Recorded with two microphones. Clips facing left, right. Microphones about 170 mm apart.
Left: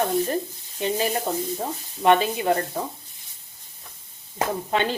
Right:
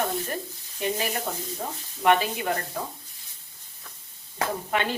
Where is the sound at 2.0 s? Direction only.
25° left (ahead or behind).